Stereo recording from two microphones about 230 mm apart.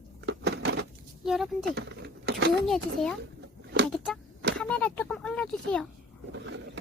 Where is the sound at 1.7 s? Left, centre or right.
Right.